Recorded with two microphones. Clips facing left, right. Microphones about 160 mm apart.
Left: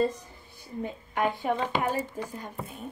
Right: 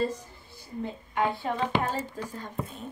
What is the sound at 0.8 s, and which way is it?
A woman's voice, 15° left (ahead or behind).